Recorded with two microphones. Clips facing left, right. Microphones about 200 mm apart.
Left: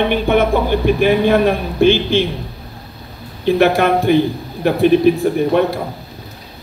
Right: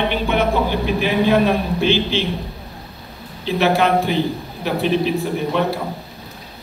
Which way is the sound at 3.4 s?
50° left (ahead or behind).